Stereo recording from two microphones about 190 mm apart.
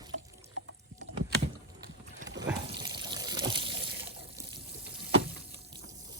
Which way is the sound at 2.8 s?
20° right (ahead or behind).